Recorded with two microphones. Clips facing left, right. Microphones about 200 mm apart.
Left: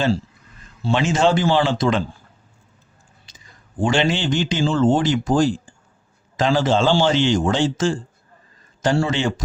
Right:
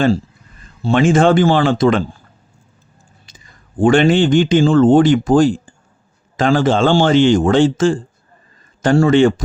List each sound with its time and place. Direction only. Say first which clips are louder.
0.8 s speech: right 6 dB; 50° right (ahead or behind)
3.2 s a man's voice: right 3 dB; 55° right (ahead or behind)